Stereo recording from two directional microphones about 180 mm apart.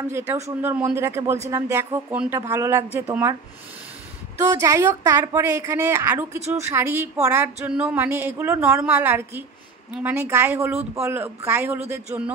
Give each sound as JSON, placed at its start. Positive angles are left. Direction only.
{"t": 0.6, "sound": "speech", "side_deg": -10}
{"t": 4.5, "sound": "speech", "side_deg": -15}